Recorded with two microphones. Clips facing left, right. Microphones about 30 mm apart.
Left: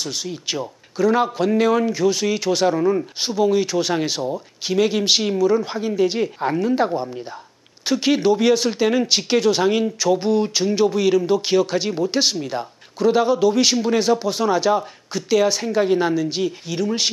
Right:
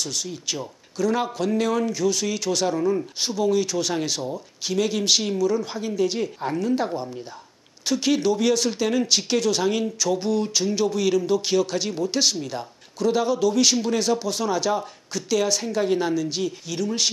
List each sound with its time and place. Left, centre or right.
0.0 s speech: left